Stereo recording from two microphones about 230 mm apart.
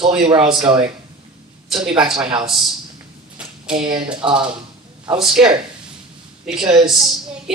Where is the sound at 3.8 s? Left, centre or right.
Right.